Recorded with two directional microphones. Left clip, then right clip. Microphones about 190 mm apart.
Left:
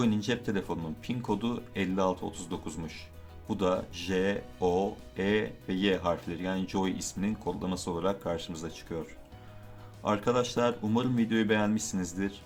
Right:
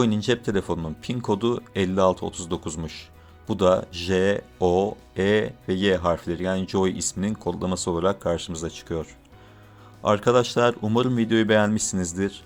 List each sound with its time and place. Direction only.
0.0 s speech: 40° right (ahead or behind)